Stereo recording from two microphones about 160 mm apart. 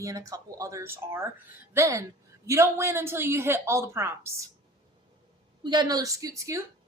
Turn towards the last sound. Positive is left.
turn(degrees=-20)  # may be behind; listen again after turning